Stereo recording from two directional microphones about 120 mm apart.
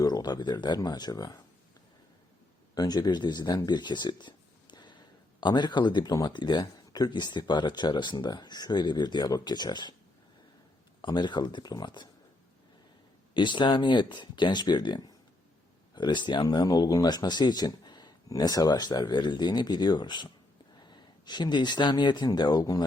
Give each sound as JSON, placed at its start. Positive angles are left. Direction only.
{"t": 0.0, "sound": "speech", "side_deg": 35}
{"t": 2.7, "sound": "speech", "side_deg": 35}
{"t": 11.0, "sound": "speech", "side_deg": 40}
{"t": 13.3, "sound": "speech", "side_deg": 40}